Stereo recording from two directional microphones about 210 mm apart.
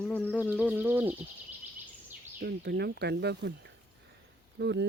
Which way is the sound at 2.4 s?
50° right (ahead or behind).